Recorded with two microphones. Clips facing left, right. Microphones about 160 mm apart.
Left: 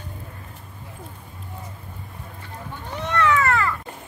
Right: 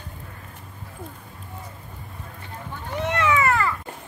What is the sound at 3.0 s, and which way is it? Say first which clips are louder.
Cat: left 1 dB; 15° right (ahead or behind).